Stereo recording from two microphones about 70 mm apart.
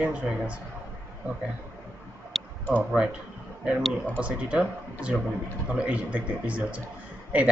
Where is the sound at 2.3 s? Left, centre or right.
Centre.